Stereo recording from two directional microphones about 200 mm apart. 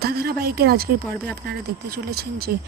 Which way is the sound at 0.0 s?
50° right (ahead or behind).